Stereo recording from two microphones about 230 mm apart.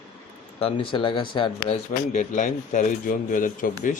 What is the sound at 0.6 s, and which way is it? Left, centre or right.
Speech, left.